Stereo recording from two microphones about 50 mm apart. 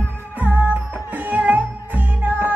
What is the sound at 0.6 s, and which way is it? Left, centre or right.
Music, right.